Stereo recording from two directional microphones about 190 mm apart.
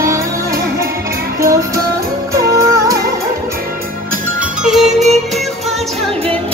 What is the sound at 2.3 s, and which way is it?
Music, 15° right (ahead or behind).